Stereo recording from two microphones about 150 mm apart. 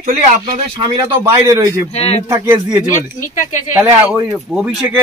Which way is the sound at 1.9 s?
45° left (ahead or behind).